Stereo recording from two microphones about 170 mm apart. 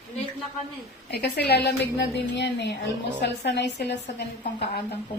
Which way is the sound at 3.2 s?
80° left.